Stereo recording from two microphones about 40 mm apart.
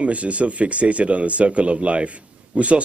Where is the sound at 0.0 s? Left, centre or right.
Right.